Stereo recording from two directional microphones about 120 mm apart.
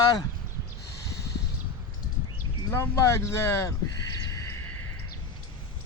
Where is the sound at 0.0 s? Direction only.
35° left (ahead or behind).